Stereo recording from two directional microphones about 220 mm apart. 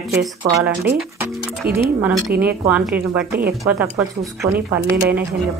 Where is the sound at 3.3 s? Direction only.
45° right (ahead or behind).